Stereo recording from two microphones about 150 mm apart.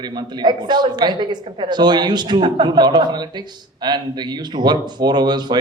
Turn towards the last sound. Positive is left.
turn(degrees=-30)  # may be behind; listen again after turning